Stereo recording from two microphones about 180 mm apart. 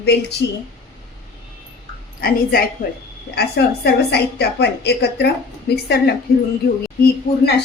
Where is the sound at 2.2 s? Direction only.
55° left (ahead or behind).